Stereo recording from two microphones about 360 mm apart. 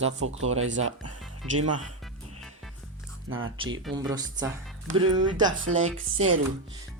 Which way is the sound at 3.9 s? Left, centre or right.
Centre.